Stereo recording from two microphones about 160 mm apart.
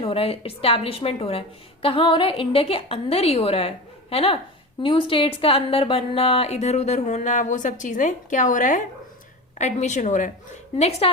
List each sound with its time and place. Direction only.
0.0 s a woman's voice: 35° left (ahead or behind)